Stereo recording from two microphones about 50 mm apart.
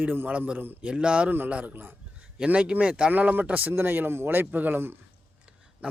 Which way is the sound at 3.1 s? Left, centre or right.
Right.